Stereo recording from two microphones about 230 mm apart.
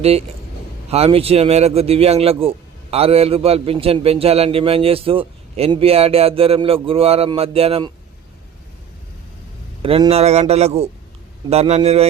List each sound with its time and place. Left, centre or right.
0.0 s a man's voice: right
9.8 s a man's voice: right